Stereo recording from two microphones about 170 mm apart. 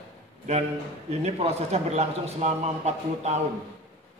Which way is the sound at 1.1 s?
40° right (ahead or behind).